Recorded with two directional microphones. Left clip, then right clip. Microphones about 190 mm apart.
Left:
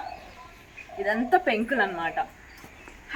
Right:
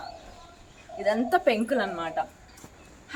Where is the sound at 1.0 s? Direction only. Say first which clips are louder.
Even; 25° right (ahead or behind).